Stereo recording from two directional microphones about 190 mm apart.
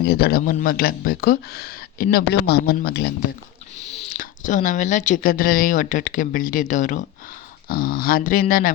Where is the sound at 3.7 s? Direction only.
40° left (ahead or behind).